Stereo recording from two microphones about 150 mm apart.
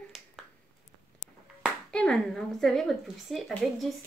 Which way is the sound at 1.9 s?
5° left (ahead or behind).